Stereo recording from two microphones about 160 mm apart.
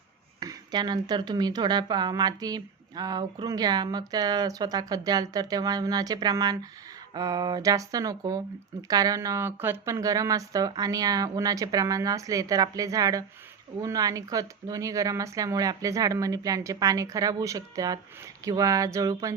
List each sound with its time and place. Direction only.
0.3 s speech: 25° right (ahead or behind)